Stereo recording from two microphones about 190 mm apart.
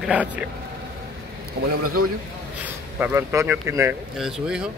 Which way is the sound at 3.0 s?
10° right (ahead or behind).